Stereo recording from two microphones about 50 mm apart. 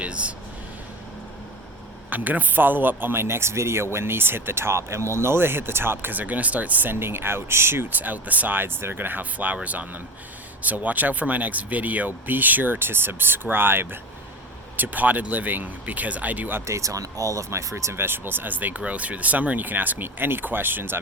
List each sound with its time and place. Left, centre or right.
0.0 s speech: right
2.0 s a man's voice: right
3.9 s a man's voice: right
7.0 s a man's voice: right
7.9 s speech: right
10.6 s speech: right
14.8 s speech: right
16.6 s speech: right
17.9 s a man's voice: right